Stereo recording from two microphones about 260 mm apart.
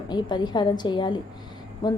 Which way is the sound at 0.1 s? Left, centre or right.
Centre.